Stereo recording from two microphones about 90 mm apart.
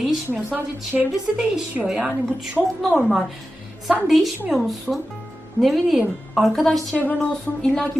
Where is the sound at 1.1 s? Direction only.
5° right (ahead or behind).